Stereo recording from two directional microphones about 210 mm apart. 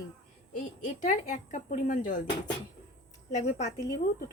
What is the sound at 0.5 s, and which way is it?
Speech, 35° left (ahead or behind).